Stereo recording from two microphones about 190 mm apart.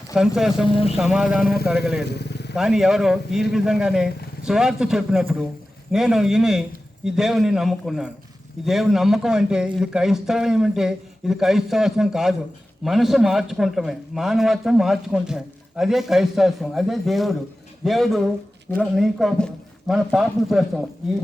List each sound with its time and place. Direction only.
0.1 s a man's voice: 5° right (ahead or behind)
2.1 s vehicle: 60° left (ahead or behind)
2.6 s a man's voice: centre (ahead or behind)